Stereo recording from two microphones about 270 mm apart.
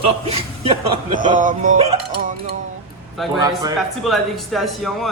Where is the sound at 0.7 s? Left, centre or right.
Centre.